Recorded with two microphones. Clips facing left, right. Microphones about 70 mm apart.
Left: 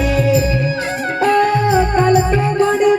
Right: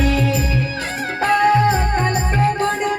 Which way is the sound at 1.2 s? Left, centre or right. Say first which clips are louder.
Left 1 dB; right.